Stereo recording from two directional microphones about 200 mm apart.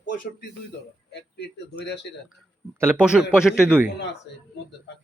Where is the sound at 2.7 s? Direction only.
10° right (ahead or behind).